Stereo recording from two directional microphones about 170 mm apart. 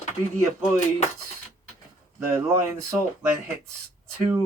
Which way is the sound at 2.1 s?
15° right (ahead or behind).